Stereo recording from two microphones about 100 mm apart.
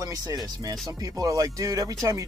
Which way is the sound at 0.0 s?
40° right (ahead or behind).